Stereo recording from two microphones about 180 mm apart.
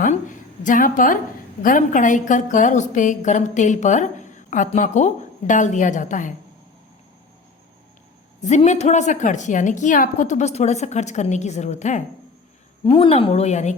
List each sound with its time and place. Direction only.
0.0 s a woman's voice: 45° left (ahead or behind)
8.4 s a woman's voice: 40° left (ahead or behind)
12.8 s a woman's voice: 30° left (ahead or behind)